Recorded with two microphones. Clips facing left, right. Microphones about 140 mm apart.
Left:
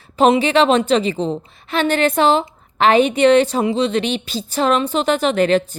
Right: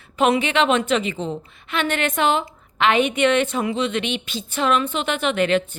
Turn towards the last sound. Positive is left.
turn(degrees=35)  # may be behind; listen again after turning